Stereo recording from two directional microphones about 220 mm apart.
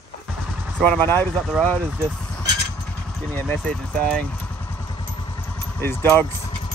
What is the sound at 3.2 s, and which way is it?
Speech, 10° left (ahead or behind).